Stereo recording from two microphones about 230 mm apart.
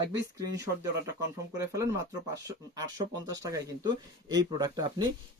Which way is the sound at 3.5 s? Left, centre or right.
Centre.